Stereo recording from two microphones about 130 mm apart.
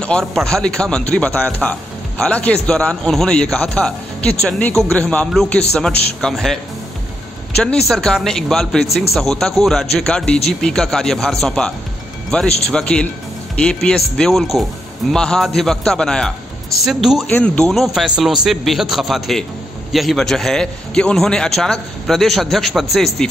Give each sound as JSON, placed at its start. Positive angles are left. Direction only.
{"t": 0.0, "sound": "a man's voice", "side_deg": 5}
{"t": 17.3, "sound": "a man's voice", "side_deg": 10}